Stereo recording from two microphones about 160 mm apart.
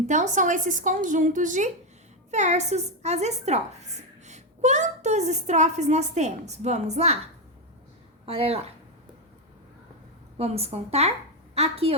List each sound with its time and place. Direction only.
0.1 s a woman's voice: 50° right (ahead or behind)
8.3 s speech: 40° right (ahead or behind)
10.3 s speech: 40° right (ahead or behind)